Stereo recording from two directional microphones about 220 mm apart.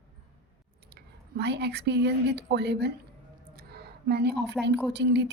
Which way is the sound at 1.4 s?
50° right (ahead or behind).